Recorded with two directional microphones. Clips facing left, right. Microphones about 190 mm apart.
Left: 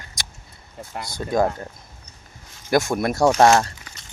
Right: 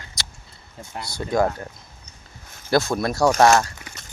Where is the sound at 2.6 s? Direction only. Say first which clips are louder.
Left 1 dB; 20° left (ahead or behind).